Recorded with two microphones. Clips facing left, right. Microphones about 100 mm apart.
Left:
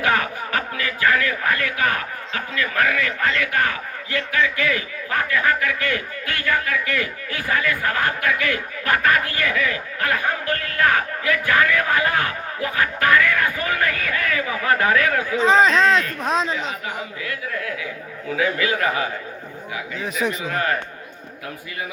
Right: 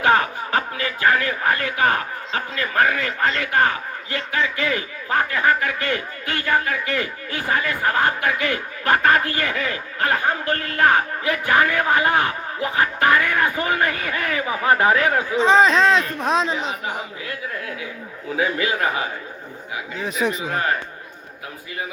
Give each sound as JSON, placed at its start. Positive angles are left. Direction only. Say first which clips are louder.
{"t": 0.0, "sound": "speech", "louder": "right 3 dB", "side_deg": -30}
{"t": 15.4, "sound": "speech", "louder": "right 1 dB", "side_deg": 0}
{"t": 16.8, "sound": "speech", "louder": "right 1 dB", "side_deg": -30}
{"t": 20.0, "sound": "speech", "louder": "right 1 dB", "side_deg": 0}
{"t": 20.5, "sound": "speech", "louder": "even", "side_deg": -25}